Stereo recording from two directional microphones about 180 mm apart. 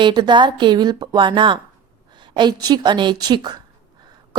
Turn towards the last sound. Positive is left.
turn(degrees=-25)  # may be behind; listen again after turning